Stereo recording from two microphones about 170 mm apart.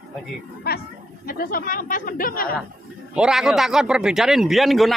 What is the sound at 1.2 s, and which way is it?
Speech, 60° left (ahead or behind).